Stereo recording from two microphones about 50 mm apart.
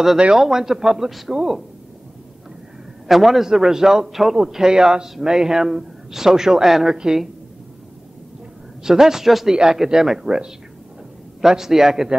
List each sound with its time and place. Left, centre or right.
0.2 s a man's voice: centre
1.3 s a man's voice: centre
3.1 s a man's voice: centre
8.8 s a man's voice: centre